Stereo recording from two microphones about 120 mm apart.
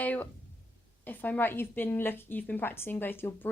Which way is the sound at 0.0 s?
15° left (ahead or behind).